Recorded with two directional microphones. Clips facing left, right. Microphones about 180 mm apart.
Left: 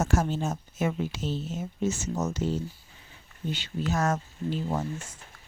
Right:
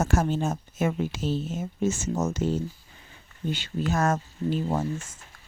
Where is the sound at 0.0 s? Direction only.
55° right (ahead or behind).